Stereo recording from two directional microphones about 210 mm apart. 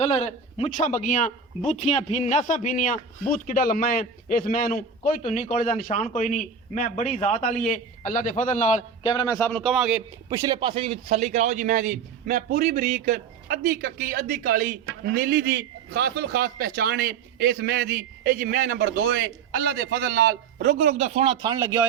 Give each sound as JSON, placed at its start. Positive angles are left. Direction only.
{"t": 0.1, "sound": "a man's voice", "side_deg": 30}
{"t": 9.1, "sound": "a man's voice", "side_deg": 20}
{"t": 9.5, "sound": "a man's voice", "side_deg": 5}
{"t": 10.2, "sound": "a man's voice", "side_deg": -15}
{"t": 21.0, "sound": "a man's voice", "side_deg": -30}
{"t": 21.4, "sound": "speech", "side_deg": -10}